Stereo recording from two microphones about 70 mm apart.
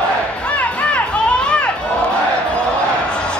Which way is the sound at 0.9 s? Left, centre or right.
Centre.